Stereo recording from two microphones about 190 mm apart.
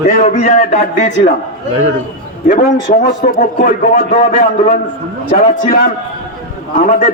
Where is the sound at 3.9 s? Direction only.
35° left (ahead or behind).